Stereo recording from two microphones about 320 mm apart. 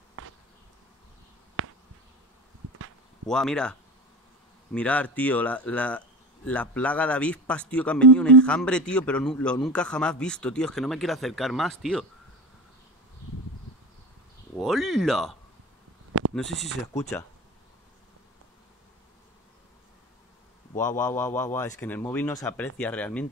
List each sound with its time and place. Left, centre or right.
1.6 s a sound: right
3.3 s speech: centre
4.7 s speech: centre
14.6 s a sound: centre
16.2 s sheep: right
20.7 s speech: centre